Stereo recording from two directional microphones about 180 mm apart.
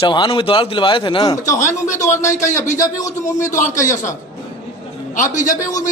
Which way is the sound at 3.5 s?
45° left (ahead or behind).